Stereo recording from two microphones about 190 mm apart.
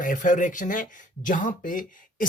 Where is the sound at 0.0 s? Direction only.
45° left (ahead or behind).